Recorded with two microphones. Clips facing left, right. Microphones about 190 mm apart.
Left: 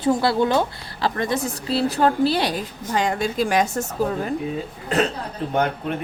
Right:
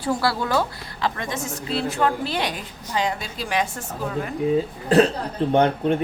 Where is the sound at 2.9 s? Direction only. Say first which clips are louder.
Left 3 dB; 50° left (ahead or behind).